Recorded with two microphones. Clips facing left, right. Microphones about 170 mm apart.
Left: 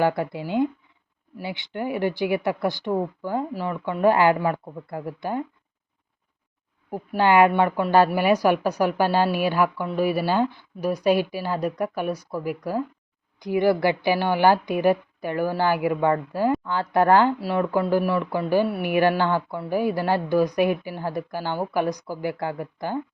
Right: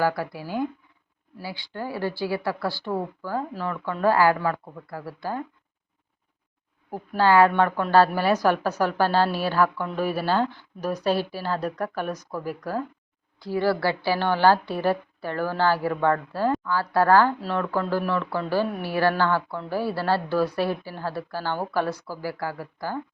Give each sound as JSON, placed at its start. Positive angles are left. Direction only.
{"t": 0.0, "sound": "speech", "side_deg": 25}
{"t": 6.9, "sound": "speech", "side_deg": 15}